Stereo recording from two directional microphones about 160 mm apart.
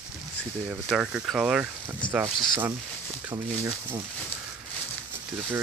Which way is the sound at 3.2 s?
15° right (ahead or behind).